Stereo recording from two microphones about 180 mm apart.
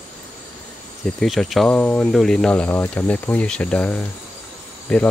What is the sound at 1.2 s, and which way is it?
Speech, centre (ahead or behind).